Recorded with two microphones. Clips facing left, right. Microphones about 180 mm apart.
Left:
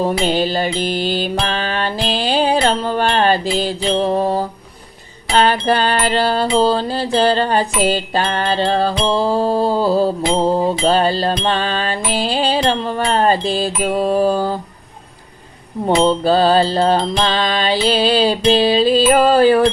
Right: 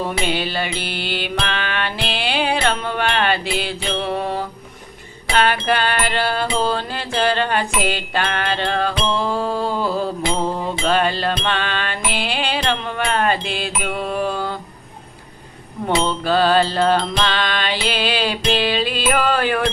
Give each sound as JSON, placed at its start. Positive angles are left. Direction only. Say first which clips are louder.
{"t": 0.0, "sound": "music", "louder": "left 6 dB", "side_deg": 40}
{"t": 16.0, "sound": "music", "louder": "left 4 dB", "side_deg": 35}